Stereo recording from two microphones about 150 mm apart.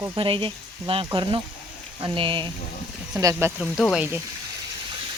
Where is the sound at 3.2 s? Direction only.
20° right (ahead or behind).